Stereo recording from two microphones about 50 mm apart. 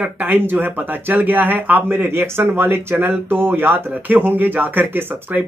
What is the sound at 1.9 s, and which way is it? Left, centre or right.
Speech, right.